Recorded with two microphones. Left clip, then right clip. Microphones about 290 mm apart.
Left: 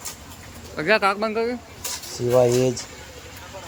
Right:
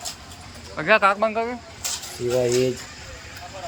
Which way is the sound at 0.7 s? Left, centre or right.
Centre.